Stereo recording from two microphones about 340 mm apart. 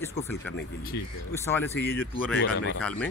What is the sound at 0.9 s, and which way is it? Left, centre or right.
Speech, left.